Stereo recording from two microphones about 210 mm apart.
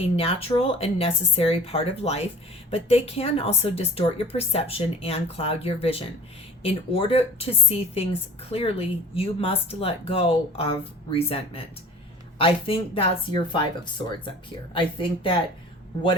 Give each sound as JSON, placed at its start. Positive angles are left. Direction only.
{"t": 0.2, "sound": "a woman's voice", "side_deg": 30}
{"t": 14.7, "sound": "a woman's voice", "side_deg": 25}